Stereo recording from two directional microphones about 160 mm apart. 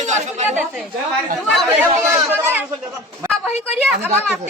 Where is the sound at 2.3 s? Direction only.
15° right (ahead or behind).